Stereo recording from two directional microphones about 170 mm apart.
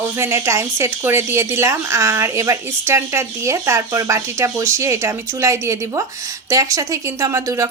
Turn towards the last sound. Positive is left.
turn(degrees=-15)  # may be behind; listen again after turning